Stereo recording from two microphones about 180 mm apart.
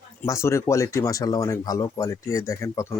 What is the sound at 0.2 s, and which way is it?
Speech, 15° left (ahead or behind).